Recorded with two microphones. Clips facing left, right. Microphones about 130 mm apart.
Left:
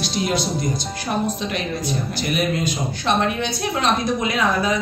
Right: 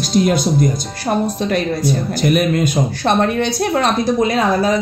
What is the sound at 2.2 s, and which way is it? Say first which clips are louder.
Speech: right 7 dB; 50° right (ahead or behind).